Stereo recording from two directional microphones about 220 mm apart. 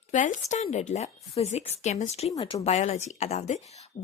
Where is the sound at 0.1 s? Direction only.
35° left (ahead or behind).